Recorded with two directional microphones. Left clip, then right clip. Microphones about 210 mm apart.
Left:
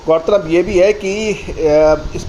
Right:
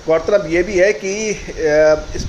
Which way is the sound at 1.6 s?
50° left (ahead or behind).